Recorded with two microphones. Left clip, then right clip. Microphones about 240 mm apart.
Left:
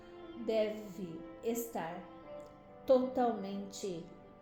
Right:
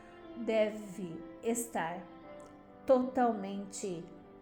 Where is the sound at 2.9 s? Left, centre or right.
Right.